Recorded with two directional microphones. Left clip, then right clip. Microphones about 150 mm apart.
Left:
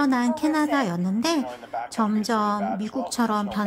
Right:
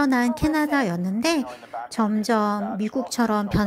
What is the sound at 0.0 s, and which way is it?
A woman's voice, 25° right (ahead or behind).